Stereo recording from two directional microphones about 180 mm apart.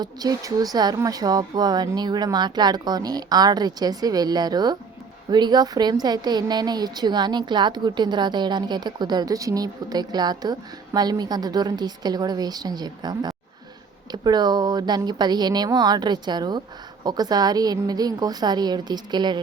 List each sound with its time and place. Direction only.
0.0 s a woman's voice: 20° right (ahead or behind)